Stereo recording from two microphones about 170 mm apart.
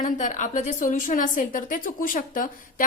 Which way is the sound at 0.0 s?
45° left (ahead or behind).